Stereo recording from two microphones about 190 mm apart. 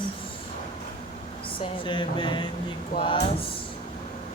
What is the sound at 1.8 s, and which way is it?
Speech, 25° left (ahead or behind).